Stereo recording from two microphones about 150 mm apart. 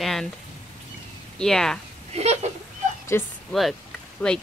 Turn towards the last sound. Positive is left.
turn(degrees=5)  # may be behind; listen again after turning